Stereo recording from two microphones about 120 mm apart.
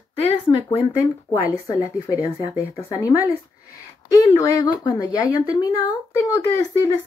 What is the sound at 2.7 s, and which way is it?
Speech, 30° left (ahead or behind).